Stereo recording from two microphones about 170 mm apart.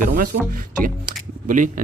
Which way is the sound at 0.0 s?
55° right (ahead or behind).